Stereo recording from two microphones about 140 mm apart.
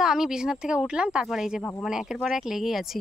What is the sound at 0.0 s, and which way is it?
Speech, 5° right (ahead or behind).